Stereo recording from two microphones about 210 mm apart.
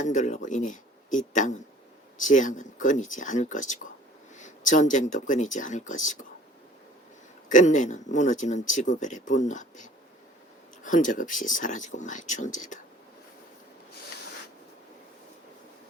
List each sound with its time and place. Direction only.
0.0 s speech: 35° left (ahead or behind)
7.4 s speech: 35° left (ahead or behind)